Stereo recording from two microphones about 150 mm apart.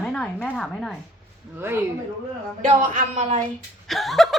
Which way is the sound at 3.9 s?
Centre (ahead or behind).